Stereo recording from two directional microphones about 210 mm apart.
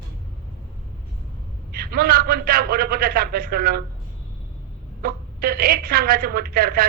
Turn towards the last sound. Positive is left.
turn(degrees=-45)  # may be behind; listen again after turning